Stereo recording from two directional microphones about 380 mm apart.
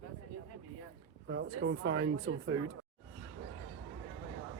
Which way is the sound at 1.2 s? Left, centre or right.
Right.